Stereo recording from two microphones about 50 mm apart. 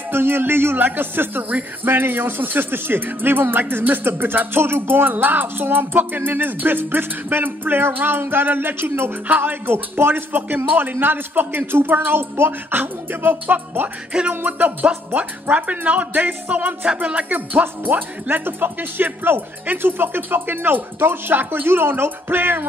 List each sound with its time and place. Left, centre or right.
0.1 s speech: right
15.5 s speech: right
16.8 s music: right
17.3 s speech: right